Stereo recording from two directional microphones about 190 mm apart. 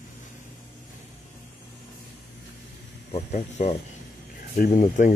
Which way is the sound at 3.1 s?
35° left (ahead or behind).